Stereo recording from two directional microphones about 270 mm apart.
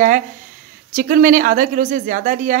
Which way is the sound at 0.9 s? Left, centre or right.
Right.